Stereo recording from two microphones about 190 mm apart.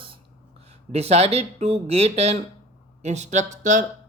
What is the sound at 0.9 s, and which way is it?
Speech, 35° right (ahead or behind).